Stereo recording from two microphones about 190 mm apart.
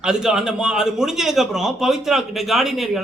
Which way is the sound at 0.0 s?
5° right (ahead or behind).